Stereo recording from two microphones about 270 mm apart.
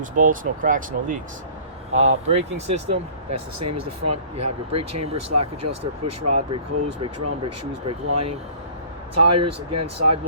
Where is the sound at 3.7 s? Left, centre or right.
Right.